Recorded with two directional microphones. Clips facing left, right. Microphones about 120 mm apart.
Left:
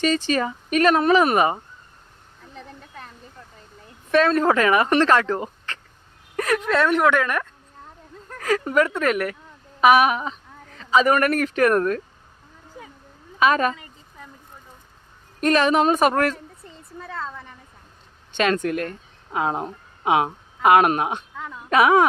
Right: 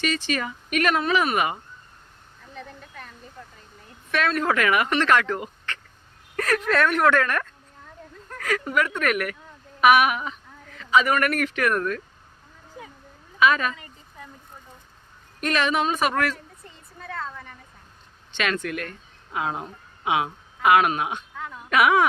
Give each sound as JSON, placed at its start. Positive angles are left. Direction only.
{"t": 0.0, "sound": "speech", "side_deg": 35}
{"t": 4.1, "sound": "speech", "side_deg": 30}
{"t": 6.3, "sound": "a woman's voice", "side_deg": 15}
{"t": 8.4, "sound": "speech", "side_deg": 30}
{"t": 13.4, "sound": "speech", "side_deg": 40}
{"t": 15.4, "sound": "speech", "side_deg": 40}
{"t": 18.3, "sound": "speech", "side_deg": 40}